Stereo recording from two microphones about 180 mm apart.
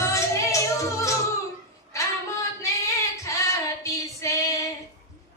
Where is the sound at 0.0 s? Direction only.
15° left (ahead or behind).